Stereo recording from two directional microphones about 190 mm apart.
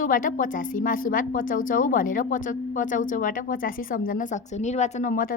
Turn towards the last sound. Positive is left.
turn(degrees=45)  # may be behind; listen again after turning